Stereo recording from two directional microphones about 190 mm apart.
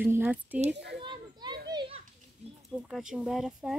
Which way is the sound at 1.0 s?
25° right (ahead or behind).